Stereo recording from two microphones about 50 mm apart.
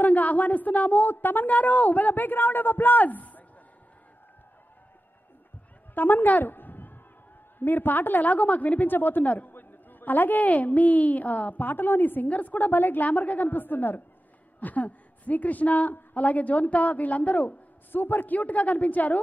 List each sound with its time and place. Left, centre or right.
0.0 s a woman's voice: left
5.9 s a woman's voice: left
9.5 s a woman's voice: left